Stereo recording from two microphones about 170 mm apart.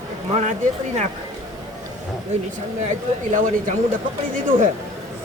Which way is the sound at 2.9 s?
50° right (ahead or behind).